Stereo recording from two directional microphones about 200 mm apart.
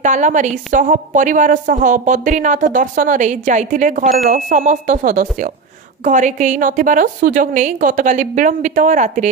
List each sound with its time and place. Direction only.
0.0 s a woman's voice: 40° right (ahead or behind)